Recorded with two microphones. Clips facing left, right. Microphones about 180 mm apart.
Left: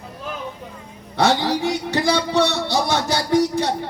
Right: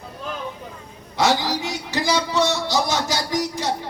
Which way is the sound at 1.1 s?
60° left (ahead or behind).